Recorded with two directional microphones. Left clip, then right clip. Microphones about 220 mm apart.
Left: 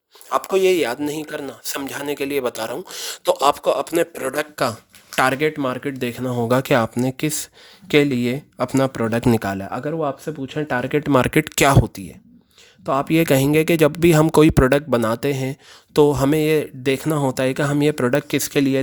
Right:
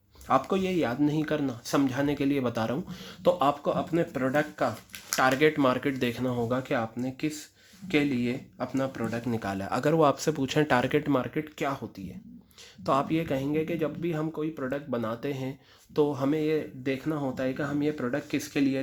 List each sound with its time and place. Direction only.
0.3 s speech: 50° left (ahead or behind)
5.1 s speech: 35° left (ahead or behind)
6.5 s speech: 50° left (ahead or behind)
9.4 s speech: 30° left (ahead or behind)
9.8 s speech: 10° left (ahead or behind); by 11.2 s 30° left (ahead or behind)
11.2 s speech: 45° left (ahead or behind)
12.8 s speech: 30° left (ahead or behind); by 18.8 s 55° left (ahead or behind)